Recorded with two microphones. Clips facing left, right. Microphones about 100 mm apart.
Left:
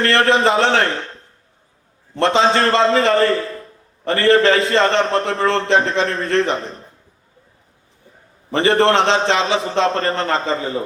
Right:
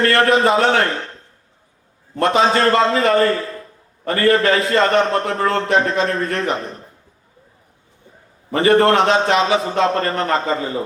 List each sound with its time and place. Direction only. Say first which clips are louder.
0.3 s a man's voice: even; 25° left (ahead or behind)
2.1 s a man's voice: even; 25° left (ahead or behind)
8.5 s a man's voice: right 1 dB; 25° left (ahead or behind)